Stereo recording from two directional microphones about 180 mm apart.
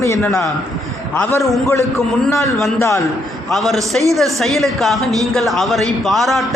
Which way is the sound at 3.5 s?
Centre (ahead or behind).